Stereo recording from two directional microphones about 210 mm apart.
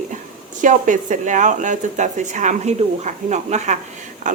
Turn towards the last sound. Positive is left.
turn(degrees=-35)  # may be behind; listen again after turning